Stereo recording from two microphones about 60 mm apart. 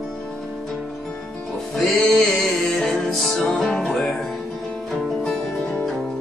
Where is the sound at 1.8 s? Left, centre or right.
Centre.